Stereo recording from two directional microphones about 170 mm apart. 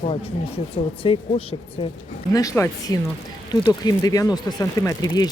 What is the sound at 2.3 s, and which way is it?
Speech, 20° left (ahead or behind).